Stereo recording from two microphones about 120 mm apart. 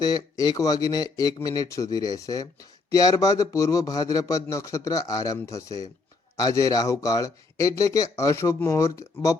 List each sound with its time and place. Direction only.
0.0 s speech: 35° left (ahead or behind)